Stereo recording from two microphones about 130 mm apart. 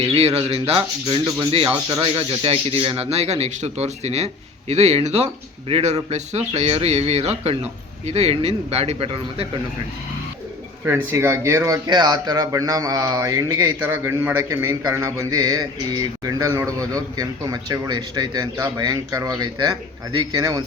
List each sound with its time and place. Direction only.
0.0 s speech: 50° right (ahead or behind)
1.9 s speech: 35° right (ahead or behind)
2.4 s speech: 45° right (ahead or behind)
11.1 s speech: 20° right (ahead or behind)